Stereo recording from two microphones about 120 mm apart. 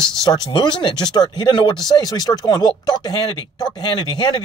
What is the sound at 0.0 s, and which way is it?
Speech, 40° left (ahead or behind).